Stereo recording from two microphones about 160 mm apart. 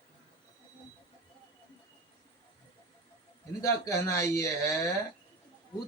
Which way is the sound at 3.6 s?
20° left (ahead or behind).